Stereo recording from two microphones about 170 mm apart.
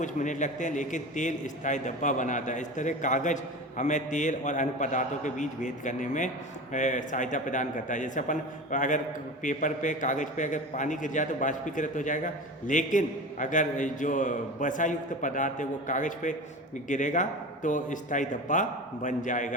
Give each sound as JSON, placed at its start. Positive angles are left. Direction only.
{"t": 0.0, "sound": "a man's voice", "side_deg": 45}